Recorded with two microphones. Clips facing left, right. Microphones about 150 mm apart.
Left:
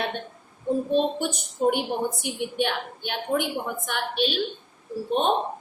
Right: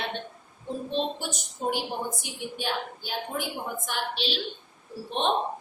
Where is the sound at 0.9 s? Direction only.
55° left (ahead or behind).